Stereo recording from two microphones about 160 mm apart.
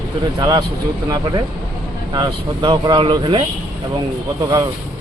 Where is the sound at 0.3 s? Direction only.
20° right (ahead or behind).